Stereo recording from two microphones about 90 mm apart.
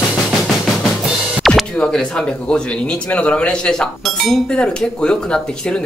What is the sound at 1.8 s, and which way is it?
Speech, 10° left (ahead or behind).